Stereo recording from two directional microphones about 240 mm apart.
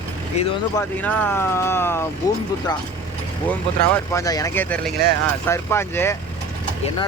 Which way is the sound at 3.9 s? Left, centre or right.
Centre.